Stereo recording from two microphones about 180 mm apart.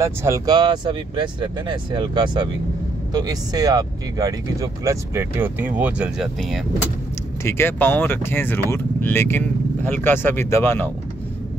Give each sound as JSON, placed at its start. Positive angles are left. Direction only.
{"t": 0.0, "sound": "speech", "side_deg": -15}
{"t": 7.4, "sound": "speech", "side_deg": 10}